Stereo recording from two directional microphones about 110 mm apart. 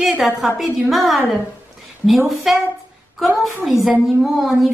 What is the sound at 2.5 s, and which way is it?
A woman's voice, centre (ahead or behind).